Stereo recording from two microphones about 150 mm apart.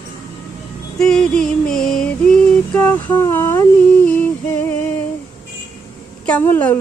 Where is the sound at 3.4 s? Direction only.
20° left (ahead or behind).